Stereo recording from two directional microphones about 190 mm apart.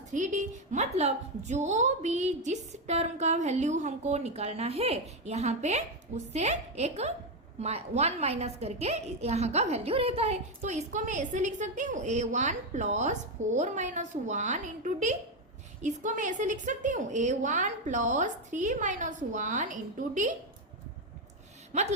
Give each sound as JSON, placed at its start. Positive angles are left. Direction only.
{"t": 0.1, "sound": "a woman's voice", "side_deg": -40}
{"t": 21.7, "sound": "speech", "side_deg": -35}